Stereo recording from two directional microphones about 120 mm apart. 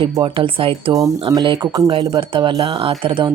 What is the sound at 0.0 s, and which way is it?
Speech, 45° right (ahead or behind).